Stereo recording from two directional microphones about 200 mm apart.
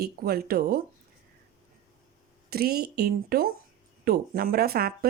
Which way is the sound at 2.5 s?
50° right (ahead or behind).